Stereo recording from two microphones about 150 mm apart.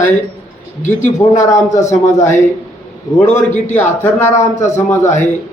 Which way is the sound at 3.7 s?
10° left (ahead or behind).